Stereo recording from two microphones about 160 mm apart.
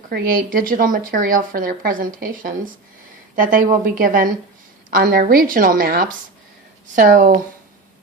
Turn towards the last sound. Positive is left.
turn(degrees=-55)  # may be behind; listen again after turning